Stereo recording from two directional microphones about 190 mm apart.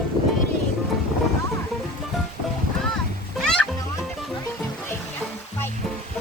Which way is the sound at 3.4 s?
5° left (ahead or behind).